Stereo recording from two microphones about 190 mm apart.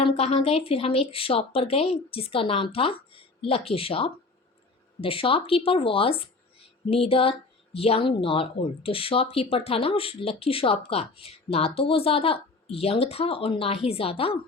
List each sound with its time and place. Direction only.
0.0 s speech: 30° left (ahead or behind)